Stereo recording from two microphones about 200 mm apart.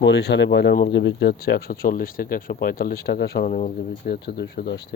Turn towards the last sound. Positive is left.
turn(degrees=55)  # may be behind; listen again after turning